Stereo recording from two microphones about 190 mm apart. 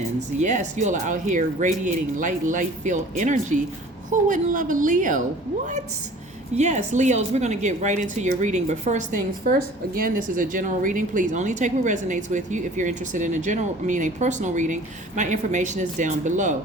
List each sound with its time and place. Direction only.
0.3 s a woman's voice: 40° right (ahead or behind)
6.6 s a woman's voice: 35° right (ahead or behind)